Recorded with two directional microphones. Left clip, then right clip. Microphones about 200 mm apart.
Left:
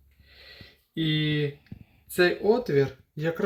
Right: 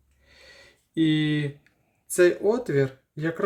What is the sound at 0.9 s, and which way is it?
Speech, 30° right (ahead or behind).